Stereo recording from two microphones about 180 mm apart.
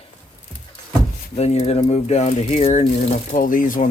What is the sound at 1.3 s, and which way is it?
Speech, 35° left (ahead or behind).